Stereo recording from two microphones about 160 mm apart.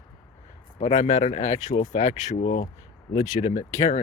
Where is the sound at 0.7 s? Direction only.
45° left (ahead or behind).